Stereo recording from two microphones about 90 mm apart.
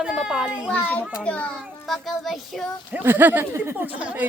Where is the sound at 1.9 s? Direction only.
Centre (ahead or behind).